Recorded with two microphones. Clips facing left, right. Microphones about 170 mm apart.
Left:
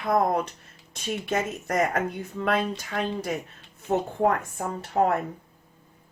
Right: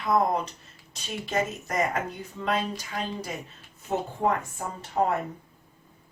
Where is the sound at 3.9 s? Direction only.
55° left (ahead or behind).